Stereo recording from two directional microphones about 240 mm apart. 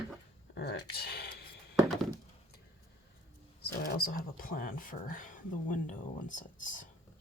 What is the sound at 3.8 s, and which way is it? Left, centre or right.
Speech, left.